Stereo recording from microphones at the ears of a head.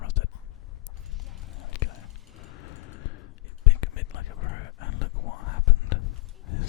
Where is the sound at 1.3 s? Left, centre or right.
Left.